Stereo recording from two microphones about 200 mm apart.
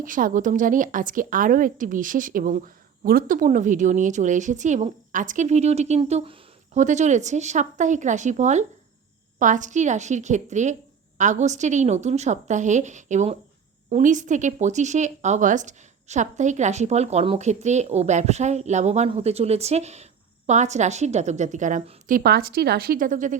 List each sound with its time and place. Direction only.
0.0 s speech: 40° right (ahead or behind)